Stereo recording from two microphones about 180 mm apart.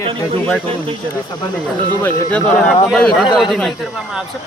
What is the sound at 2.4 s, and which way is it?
Speech, 5° left (ahead or behind).